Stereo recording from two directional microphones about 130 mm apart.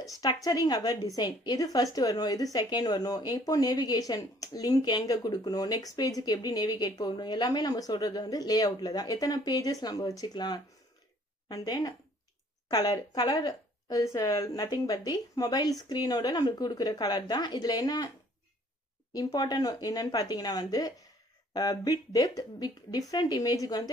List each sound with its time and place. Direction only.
0.0 s a woman's voice: 30° left (ahead or behind)
19.1 s a woman's voice: 30° left (ahead or behind)